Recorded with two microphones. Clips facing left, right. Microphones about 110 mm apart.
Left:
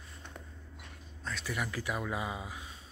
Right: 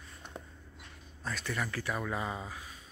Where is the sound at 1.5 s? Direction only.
15° left (ahead or behind).